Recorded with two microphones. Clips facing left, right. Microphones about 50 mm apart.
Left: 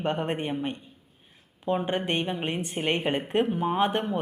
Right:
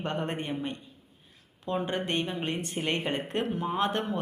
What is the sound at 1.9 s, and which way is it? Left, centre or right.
Speech, left.